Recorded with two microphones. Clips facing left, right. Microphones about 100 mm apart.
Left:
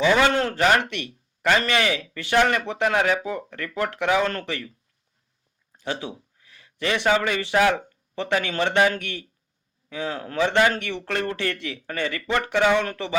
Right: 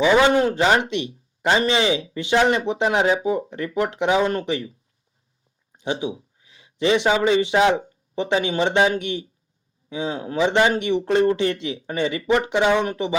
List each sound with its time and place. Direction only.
0.0 s a man's voice: 20° right (ahead or behind)
5.7 s a man's voice: 20° right (ahead or behind)